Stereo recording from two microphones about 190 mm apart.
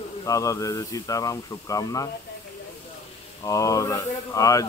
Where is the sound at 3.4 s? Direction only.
15° left (ahead or behind).